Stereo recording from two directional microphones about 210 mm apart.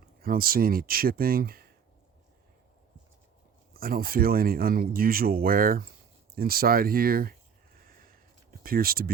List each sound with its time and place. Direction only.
0.2 s speech: 45° right (ahead or behind)
3.8 s speech: 45° right (ahead or behind)
8.6 s speech: 45° right (ahead or behind)